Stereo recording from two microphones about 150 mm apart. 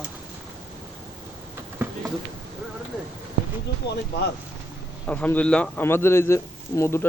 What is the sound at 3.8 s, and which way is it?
Speech, 90° left.